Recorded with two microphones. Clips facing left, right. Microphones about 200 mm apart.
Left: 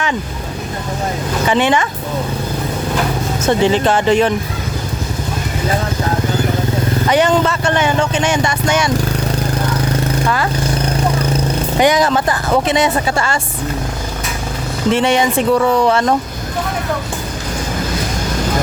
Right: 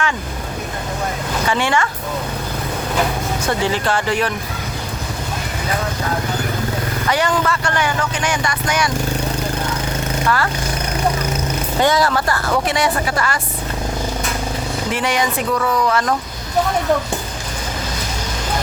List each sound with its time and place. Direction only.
1.5 s speech: 20° left (ahead or behind)
3.4 s speech: 20° left (ahead or behind)
7.1 s speech: 20° left (ahead or behind)
10.2 s speech: 15° left (ahead or behind)
11.8 s speech: 20° left (ahead or behind)
14.9 s speech: 25° left (ahead or behind)